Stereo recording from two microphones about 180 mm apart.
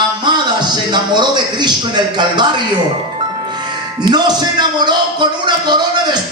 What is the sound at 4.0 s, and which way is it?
Speech, 25° right (ahead or behind).